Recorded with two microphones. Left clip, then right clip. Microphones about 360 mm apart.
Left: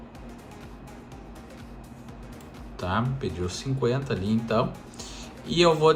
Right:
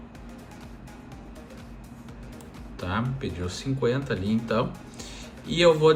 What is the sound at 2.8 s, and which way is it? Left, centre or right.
Speech, centre.